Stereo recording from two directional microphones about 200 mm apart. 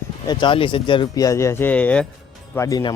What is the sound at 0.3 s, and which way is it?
Speech, 25° left (ahead or behind).